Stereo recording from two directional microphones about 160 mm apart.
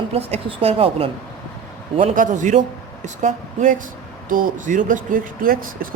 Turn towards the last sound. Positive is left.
turn(degrees=-65)  # may be behind; listen again after turning